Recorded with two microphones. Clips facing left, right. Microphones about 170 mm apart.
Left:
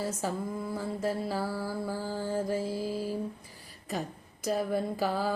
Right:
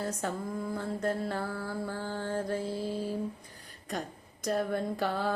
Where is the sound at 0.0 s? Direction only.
Centre (ahead or behind).